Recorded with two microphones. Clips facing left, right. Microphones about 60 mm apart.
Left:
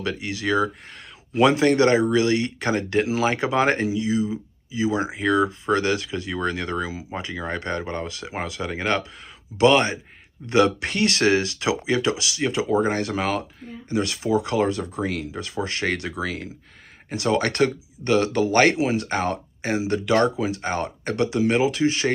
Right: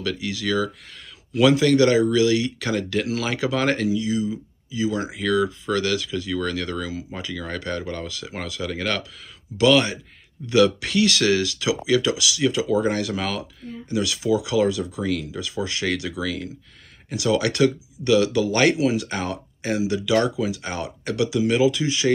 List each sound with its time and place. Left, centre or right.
0.0 s speech: left